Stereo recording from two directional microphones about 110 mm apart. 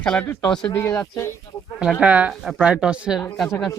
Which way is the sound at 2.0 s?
10° right (ahead or behind).